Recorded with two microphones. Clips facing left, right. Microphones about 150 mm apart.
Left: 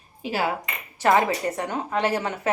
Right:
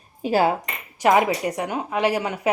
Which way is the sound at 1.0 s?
15° right (ahead or behind).